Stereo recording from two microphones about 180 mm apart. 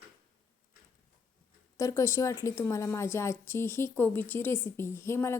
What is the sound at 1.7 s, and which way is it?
A woman's voice, 15° left (ahead or behind).